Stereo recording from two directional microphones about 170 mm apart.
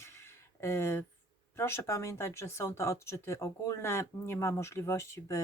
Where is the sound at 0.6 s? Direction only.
15° left (ahead or behind).